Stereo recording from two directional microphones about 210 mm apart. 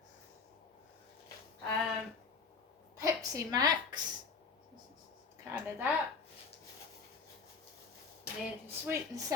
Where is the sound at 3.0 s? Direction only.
20° right (ahead or behind).